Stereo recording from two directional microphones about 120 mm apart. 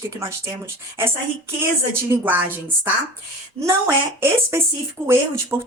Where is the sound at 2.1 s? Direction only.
15° right (ahead or behind).